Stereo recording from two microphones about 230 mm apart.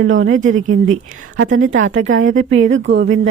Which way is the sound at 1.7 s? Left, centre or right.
Right.